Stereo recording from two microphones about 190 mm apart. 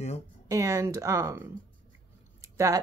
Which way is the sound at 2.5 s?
15° right (ahead or behind).